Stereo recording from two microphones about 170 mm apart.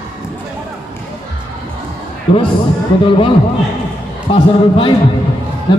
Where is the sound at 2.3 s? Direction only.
30° left (ahead or behind).